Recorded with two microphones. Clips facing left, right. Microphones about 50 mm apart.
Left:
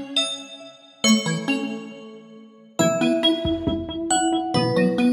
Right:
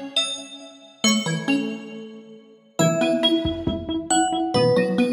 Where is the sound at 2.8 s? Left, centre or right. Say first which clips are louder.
Even; centre.